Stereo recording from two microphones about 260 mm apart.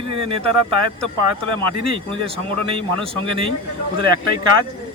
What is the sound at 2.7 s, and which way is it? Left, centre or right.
Speech, right.